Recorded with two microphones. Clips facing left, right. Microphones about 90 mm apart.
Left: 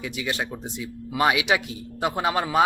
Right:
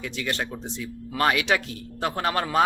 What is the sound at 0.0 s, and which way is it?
Speech, 10° left (ahead or behind).